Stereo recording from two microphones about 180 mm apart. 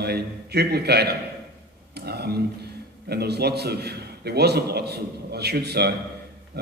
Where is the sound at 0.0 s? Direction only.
65° right (ahead or behind).